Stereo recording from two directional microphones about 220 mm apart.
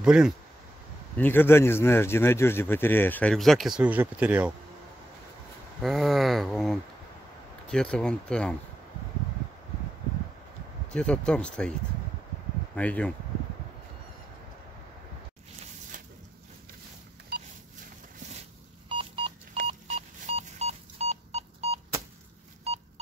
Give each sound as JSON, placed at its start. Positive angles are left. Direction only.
{"t": 0.0, "sound": "speech", "side_deg": -5}
{"t": 1.1, "sound": "speech", "side_deg": 10}
{"t": 5.8, "sound": "speech", "side_deg": 0}
{"t": 10.9, "sound": "speech", "side_deg": 5}
{"t": 12.7, "sound": "speech", "side_deg": 5}
{"t": 18.9, "sound": "a sound", "side_deg": -25}
{"t": 19.5, "sound": "telephone dialing", "side_deg": -30}